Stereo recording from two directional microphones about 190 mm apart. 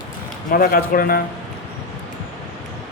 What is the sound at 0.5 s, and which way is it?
Speech, 50° left (ahead or behind).